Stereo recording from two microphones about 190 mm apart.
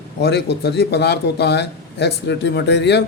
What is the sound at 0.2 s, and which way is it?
Speech, 60° left (ahead or behind).